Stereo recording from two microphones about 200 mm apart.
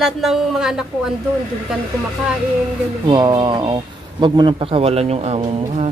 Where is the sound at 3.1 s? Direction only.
20° right (ahead or behind).